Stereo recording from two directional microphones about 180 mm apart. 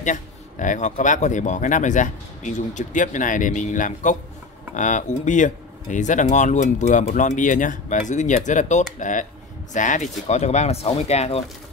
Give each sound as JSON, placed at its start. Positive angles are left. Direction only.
{"t": 0.0, "sound": "speech", "side_deg": 45}